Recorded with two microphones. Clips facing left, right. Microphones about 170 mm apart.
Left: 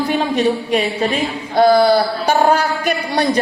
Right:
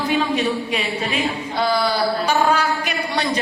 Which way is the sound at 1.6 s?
50° left (ahead or behind).